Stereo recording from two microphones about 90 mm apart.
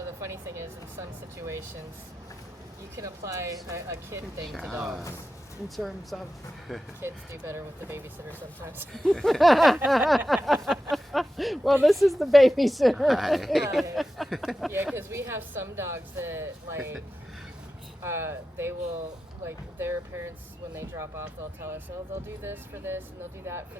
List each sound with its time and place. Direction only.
0.2 s speech: 30° right (ahead or behind)
2.9 s speech: 35° right (ahead or behind)
4.4 s speech: centre (ahead or behind)
7.0 s speech: 30° right (ahead or behind)
8.9 s speech: 5° left (ahead or behind)
14.9 s speech: 30° right (ahead or behind)
18.0 s speech: 30° right (ahead or behind)